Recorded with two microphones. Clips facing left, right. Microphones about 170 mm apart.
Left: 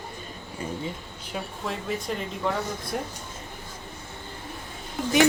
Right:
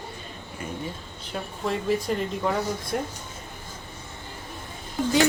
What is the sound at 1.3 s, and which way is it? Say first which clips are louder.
Speech: right 3 dB; centre (ahead or behind).